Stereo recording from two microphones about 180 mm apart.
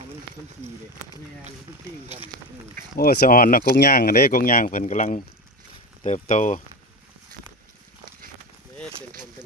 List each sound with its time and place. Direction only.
2.9 s speech: 55° left (ahead or behind)